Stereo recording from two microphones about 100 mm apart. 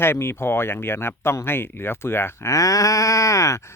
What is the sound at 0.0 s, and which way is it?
Speech, 25° left (ahead or behind).